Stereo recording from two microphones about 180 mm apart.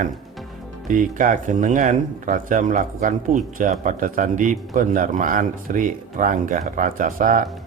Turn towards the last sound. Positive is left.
turn(degrees=-45)  # may be behind; listen again after turning